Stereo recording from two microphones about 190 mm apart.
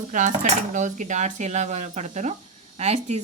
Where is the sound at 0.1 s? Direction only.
40° right (ahead or behind).